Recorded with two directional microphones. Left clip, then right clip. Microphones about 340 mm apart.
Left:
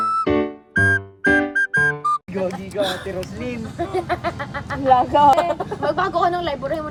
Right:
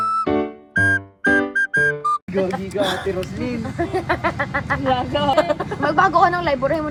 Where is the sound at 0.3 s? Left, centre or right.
Centre.